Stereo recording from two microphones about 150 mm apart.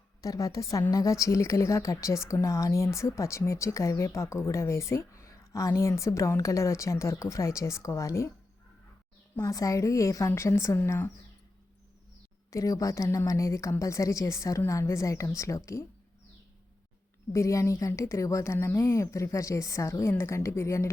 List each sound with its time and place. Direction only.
0.2 s a woman's voice: 20° left (ahead or behind)
9.3 s a woman's voice: 20° left (ahead or behind)
12.5 s a woman's voice: 20° left (ahead or behind)
17.3 s a woman's voice: 20° left (ahead or behind)